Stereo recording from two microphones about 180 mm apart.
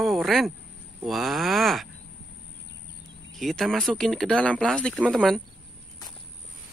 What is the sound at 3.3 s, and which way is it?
Speech, centre (ahead or behind).